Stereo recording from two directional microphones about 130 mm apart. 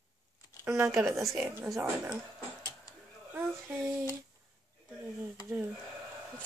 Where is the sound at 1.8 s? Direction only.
15° right (ahead or behind).